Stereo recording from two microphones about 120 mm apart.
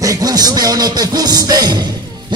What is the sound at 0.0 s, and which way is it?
Music, 30° right (ahead or behind).